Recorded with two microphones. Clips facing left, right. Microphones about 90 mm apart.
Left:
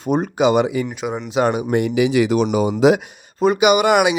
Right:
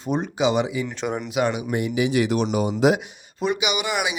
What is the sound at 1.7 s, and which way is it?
Speech, 80° left.